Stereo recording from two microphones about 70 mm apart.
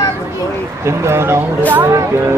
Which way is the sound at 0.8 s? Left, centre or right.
Right.